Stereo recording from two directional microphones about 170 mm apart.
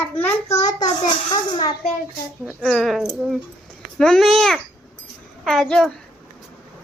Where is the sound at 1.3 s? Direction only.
25° left (ahead or behind).